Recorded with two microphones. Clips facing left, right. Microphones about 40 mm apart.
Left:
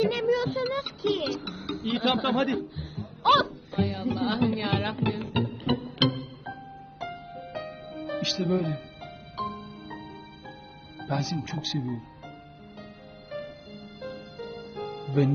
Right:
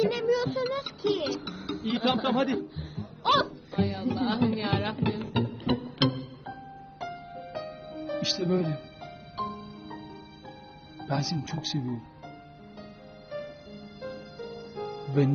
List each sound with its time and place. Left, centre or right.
0.0 s a sound: left
3.2 s speech: left
5.1 s music: left
11.0 s speech: left
14.0 s music: left